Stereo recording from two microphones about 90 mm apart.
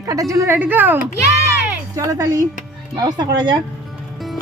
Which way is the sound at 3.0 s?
50° right (ahead or behind).